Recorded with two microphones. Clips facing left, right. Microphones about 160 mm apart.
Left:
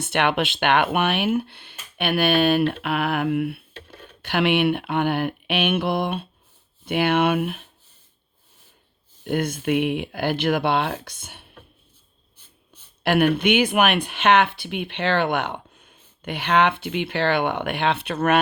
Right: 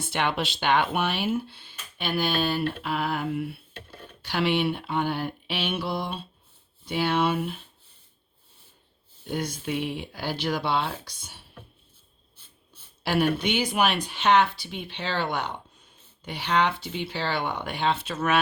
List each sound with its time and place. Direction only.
0.0 s speech: 65° left (ahead or behind)
9.2 s speech: 55° left (ahead or behind)
13.0 s speech: 60° left (ahead or behind)